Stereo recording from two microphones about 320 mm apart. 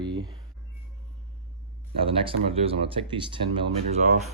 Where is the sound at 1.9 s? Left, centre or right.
Centre.